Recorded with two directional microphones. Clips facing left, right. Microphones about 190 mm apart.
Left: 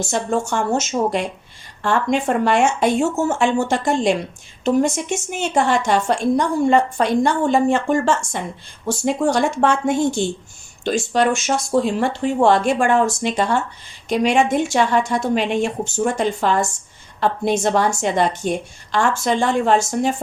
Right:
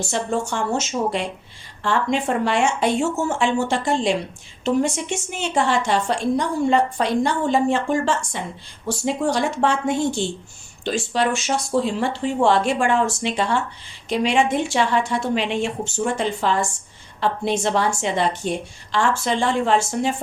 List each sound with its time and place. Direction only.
0.0 s a woman's voice: 45° left (ahead or behind)